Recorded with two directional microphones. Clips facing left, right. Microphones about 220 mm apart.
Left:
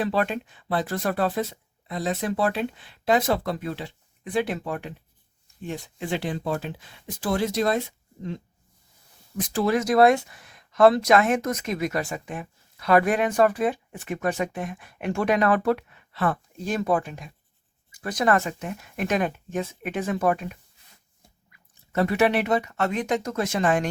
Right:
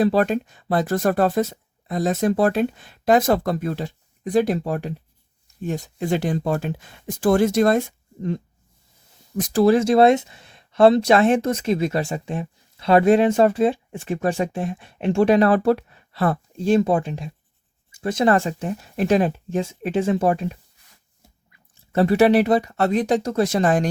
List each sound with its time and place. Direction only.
0.0 s speech: 40° right (ahead or behind)
9.4 s speech: 40° right (ahead or behind)